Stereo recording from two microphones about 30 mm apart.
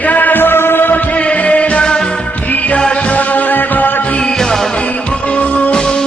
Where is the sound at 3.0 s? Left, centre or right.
Left.